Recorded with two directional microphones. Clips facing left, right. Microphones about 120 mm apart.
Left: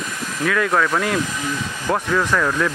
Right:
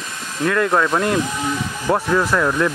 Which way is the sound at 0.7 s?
20° right (ahead or behind).